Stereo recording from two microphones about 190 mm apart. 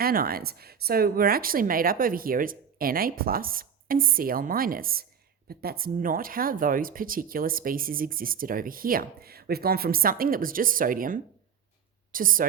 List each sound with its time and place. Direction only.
0.0 s speech: 50° right (ahead or behind)